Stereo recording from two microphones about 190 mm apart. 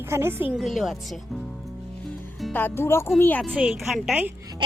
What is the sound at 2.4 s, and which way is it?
A woman's voice, 10° left (ahead or behind).